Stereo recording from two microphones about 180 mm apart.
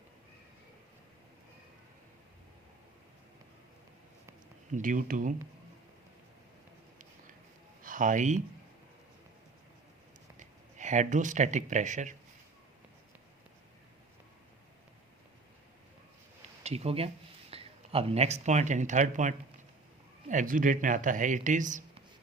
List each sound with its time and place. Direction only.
4.7 s speech: 45° right (ahead or behind)
7.8 s a sound: 45° right (ahead or behind)
10.3 s speech: 45° right (ahead or behind)
16.6 s speech: 35° right (ahead or behind)